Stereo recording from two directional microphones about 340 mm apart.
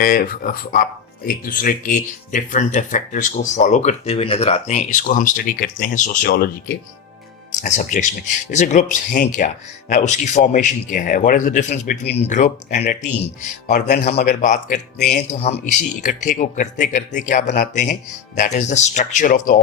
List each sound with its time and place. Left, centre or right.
0.0 s speech: left